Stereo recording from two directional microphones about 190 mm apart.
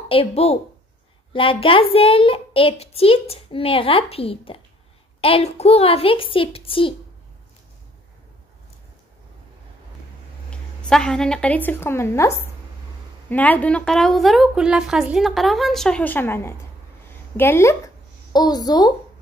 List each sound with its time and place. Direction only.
0.1 s a woman's voice: 30° left (ahead or behind)
10.5 s a woman's voice: 5° left (ahead or behind); by 18.9 s 20° left (ahead or behind)